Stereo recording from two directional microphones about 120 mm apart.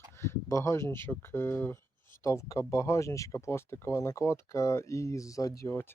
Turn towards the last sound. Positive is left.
turn(degrees=25)  # may be behind; listen again after turning